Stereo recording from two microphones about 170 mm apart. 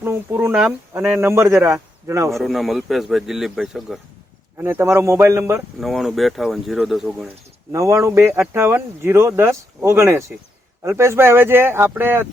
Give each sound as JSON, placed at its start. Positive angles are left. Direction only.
{"t": 0.0, "sound": "speech", "side_deg": -15}
{"t": 2.3, "sound": "speech", "side_deg": 0}
{"t": 4.5, "sound": "speech", "side_deg": -15}
{"t": 5.8, "sound": "speech", "side_deg": 0}
{"t": 7.7, "sound": "speech", "side_deg": -15}